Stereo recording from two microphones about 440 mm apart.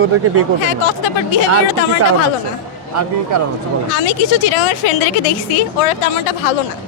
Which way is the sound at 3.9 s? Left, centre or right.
Left.